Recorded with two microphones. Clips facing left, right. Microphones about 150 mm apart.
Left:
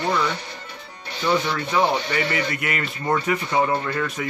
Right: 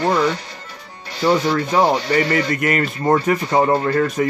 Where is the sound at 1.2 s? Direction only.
40° right (ahead or behind).